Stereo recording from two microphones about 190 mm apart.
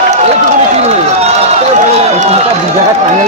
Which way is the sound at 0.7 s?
35° right (ahead or behind).